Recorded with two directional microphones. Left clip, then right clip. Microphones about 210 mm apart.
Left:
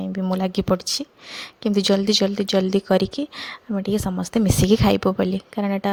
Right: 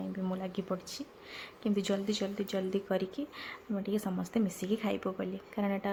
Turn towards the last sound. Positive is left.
turn(degrees=30)  # may be behind; listen again after turning